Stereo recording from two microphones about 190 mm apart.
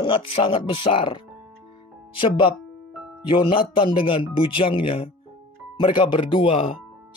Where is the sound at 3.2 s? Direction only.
25° left (ahead or behind).